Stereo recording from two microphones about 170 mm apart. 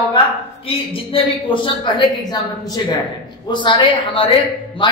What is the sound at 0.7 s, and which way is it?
A man's voice, 30° left (ahead or behind).